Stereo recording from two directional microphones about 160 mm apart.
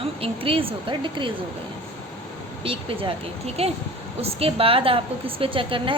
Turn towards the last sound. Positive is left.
turn(degrees=-30)  # may be behind; listen again after turning